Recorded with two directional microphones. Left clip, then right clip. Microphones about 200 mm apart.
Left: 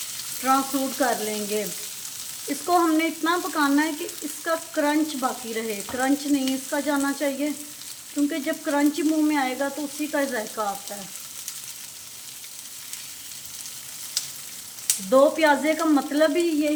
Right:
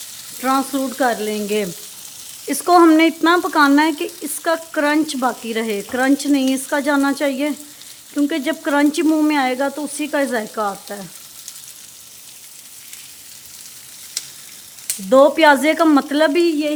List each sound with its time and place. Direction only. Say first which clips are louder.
0.4 s speech: right 4 dB; 50° right (ahead or behind)
2.5 s speech: right 10 dB; 50° right (ahead or behind)
4.4 s frying: right 6 dB; 60° right (ahead or behind)
15.1 s speech: right 7 dB; 50° right (ahead or behind)